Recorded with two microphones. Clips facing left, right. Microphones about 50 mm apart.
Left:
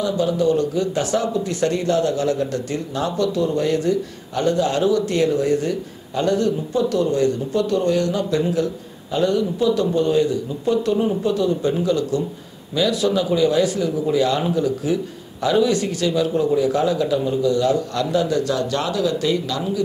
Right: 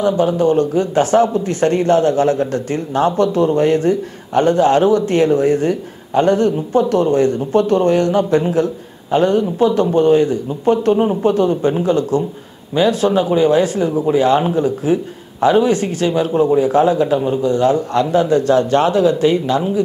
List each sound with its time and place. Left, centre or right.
0.0 s speech: right